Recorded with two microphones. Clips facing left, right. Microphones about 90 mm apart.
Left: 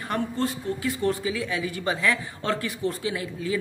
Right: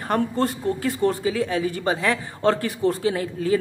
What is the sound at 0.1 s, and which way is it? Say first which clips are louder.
Speech: right 5 dB; 40° right (ahead or behind).